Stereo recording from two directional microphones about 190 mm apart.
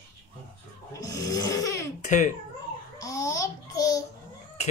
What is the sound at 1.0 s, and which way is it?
Snoring, 20° left (ahead or behind).